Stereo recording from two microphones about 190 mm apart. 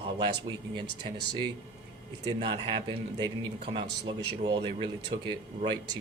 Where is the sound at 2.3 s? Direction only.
25° right (ahead or behind).